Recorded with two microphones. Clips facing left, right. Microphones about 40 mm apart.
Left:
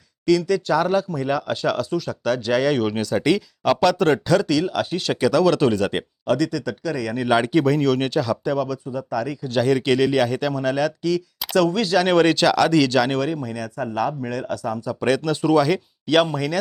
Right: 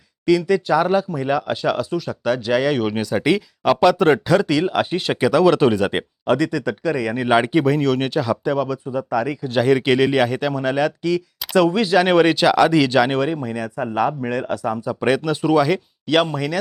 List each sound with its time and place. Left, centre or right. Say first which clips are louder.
0.3 s speech: right 2 dB; centre